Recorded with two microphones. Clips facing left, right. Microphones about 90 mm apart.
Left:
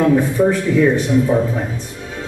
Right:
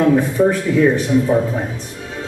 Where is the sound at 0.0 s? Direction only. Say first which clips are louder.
Even; 5° right (ahead or behind).